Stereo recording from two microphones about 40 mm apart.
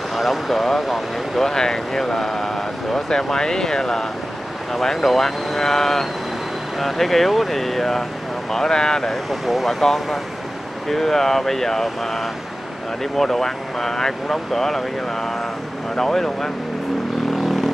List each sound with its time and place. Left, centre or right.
0.1 s speech: centre
1.5 s speech: centre
9.1 s speech: centre